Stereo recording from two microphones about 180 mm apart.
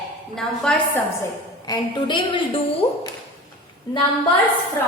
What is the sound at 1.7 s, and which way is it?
A woman's voice, 25° left (ahead or behind).